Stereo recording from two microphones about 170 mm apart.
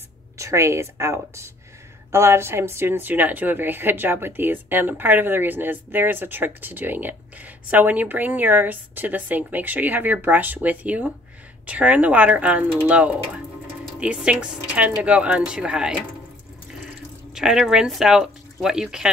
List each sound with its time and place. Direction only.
0.4 s speech: 15° right (ahead or behind)
17.3 s speech: 5° right (ahead or behind)